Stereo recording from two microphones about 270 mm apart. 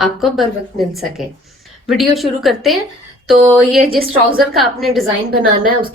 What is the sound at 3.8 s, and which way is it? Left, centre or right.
Speech, right.